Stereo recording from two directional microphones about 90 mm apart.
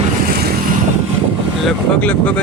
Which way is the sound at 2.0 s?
15° left (ahead or behind).